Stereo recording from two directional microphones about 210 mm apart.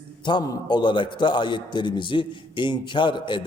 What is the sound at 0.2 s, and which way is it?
A man's voice, 20° left (ahead or behind).